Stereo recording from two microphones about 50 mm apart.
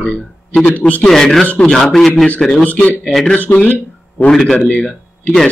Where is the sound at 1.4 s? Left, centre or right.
Left.